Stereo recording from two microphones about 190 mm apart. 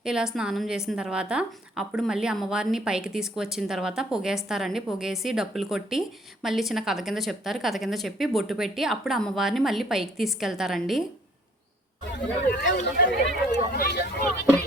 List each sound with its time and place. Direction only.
0.0 s a woman's voice: 5° right (ahead or behind)
12.5 s speech: 55° left (ahead or behind)